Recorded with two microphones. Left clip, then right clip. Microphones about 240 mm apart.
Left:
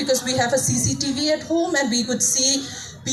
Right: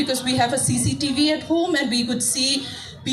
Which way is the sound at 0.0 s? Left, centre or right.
Right.